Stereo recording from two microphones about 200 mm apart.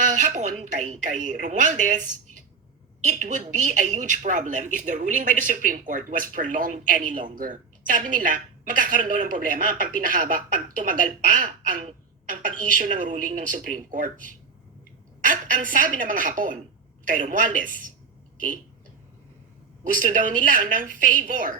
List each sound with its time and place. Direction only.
0.1 s a sound: 40° right (ahead or behind)
0.6 s speech: 35° right (ahead or behind)
3.1 s speech: 40° right (ahead or behind)
19.8 s speech: 40° right (ahead or behind)